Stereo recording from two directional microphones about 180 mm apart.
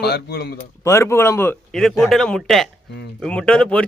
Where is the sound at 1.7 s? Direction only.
Centre (ahead or behind).